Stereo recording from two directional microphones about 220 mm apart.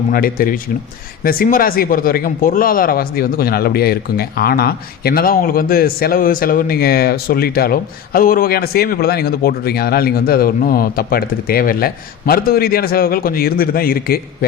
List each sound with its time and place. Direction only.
0.1 s speech: 40° left (ahead or behind)